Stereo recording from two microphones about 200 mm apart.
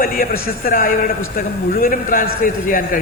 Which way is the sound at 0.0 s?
45° left (ahead or behind).